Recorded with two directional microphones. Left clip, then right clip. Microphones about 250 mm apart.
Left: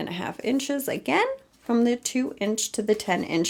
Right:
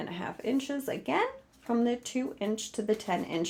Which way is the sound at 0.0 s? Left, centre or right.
Left.